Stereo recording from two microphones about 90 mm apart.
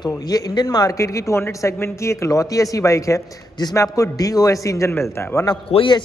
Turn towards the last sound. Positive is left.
turn(degrees=70)  # may be behind; listen again after turning